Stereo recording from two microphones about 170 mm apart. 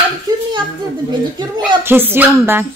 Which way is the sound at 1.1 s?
25° right (ahead or behind).